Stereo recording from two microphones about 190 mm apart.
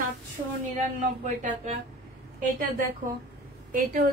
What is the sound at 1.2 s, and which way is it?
Speech, 40° right (ahead or behind).